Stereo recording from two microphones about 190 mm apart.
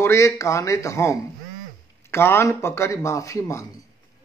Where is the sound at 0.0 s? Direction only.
15° left (ahead or behind).